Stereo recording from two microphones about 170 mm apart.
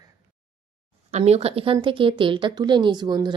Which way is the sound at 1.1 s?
40° right (ahead or behind).